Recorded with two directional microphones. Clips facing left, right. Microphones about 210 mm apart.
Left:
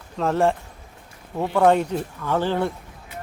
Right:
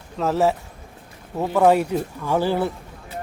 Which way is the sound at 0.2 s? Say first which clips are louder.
Right 1 dB; 5° right (ahead or behind).